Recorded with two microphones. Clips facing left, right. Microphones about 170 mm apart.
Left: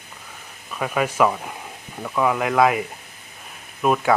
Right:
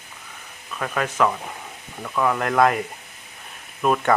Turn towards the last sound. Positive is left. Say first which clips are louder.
# left 1 dB
turn(degrees=5)  # may be behind; listen again after turning